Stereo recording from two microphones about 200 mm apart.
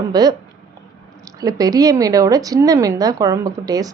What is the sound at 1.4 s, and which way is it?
Speech, 20° right (ahead or behind).